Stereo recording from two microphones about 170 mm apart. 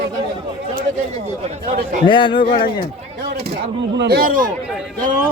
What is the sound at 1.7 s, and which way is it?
Speech, 50° right (ahead or behind).